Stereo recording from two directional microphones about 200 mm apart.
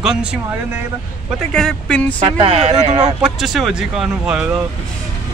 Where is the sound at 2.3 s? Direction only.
30° right (ahead or behind).